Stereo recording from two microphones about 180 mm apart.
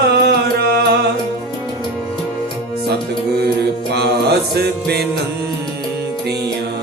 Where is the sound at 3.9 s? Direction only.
65° right (ahead or behind).